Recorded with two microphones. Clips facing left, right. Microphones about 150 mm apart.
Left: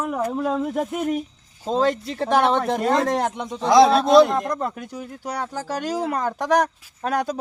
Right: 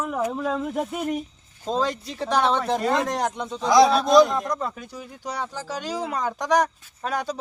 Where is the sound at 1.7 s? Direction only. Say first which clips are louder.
Left 2 dB; 20° left (ahead or behind).